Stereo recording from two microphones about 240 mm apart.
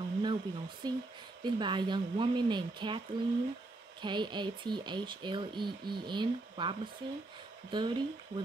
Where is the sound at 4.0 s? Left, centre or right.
Centre.